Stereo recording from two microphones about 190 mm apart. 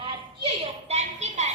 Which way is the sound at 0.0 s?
25° right (ahead or behind).